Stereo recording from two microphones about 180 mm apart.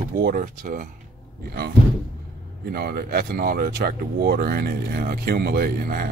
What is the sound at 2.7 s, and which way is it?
Speech, 60° right (ahead or behind).